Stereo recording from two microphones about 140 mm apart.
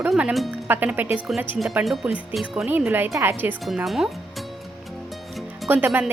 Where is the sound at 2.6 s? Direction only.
15° right (ahead or behind).